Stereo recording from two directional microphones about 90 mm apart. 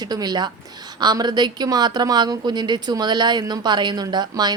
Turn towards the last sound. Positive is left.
turn(degrees=-50)  # may be behind; listen again after turning